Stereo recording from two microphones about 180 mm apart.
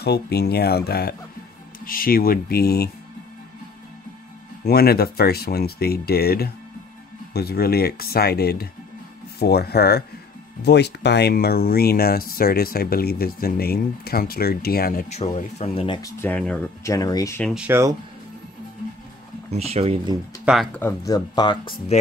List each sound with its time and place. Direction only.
0.0 s speech: 65° left (ahead or behind)
4.6 s speech: 60° left (ahead or behind); by 16.0 s 35° left (ahead or behind)
16.0 s speech: 15° left (ahead or behind)
16.8 s speech: 20° left (ahead or behind)
17.4 s speech: centre (ahead or behind)
17.6 s speech: 15° right (ahead or behind)
19.5 s speech: 35° right (ahead or behind)
20.4 s speech: centre (ahead or behind)
20.8 s speech: 20° left (ahead or behind)